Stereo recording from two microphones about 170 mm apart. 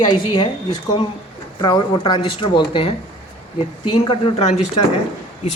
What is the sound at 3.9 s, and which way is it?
Speech, 35° left (ahead or behind).